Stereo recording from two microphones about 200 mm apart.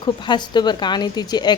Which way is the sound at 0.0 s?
20° left (ahead or behind).